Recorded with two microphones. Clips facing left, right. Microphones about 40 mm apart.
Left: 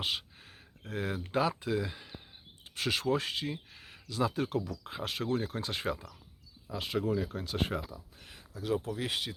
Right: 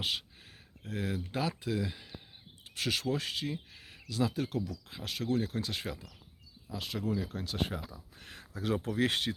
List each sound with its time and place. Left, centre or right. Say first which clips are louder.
0.0 s speech: even; centre
4.4 s speech: left 2 dB; centre
4.7 s speech: left 3 dB; left
4.9 s speech: even; centre
7.9 s a sound: right 1 dB; centre
9.0 s speech: right 5 dB; centre